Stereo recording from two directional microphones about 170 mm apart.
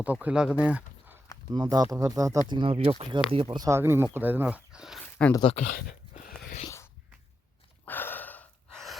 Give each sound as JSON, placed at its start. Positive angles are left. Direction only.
{"t": 0.0, "sound": "speech", "side_deg": -10}
{"t": 1.5, "sound": "speech", "side_deg": -20}
{"t": 5.1, "sound": "speech", "side_deg": 15}
{"t": 5.4, "sound": "speech", "side_deg": 35}
{"t": 6.3, "sound": "a sound", "side_deg": 5}
{"t": 7.9, "sound": "a sound", "side_deg": 10}